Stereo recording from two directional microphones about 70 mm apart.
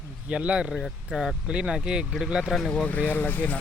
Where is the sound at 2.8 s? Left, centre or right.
Left.